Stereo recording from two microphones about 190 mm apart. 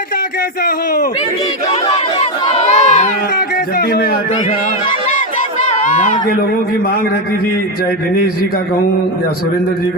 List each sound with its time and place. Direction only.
2.6 s crowd: 35° left (ahead or behind)
3.8 s a man's voice: 55° left (ahead or behind)
5.8 s speech: 40° left (ahead or behind)